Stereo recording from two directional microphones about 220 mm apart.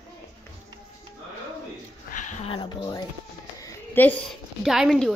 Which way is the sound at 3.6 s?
10° left (ahead or behind).